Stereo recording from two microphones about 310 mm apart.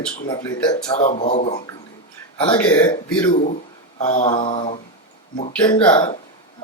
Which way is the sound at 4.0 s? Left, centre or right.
Left.